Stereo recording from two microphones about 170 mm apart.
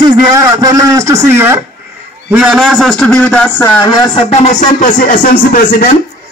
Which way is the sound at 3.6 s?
20° left (ahead or behind).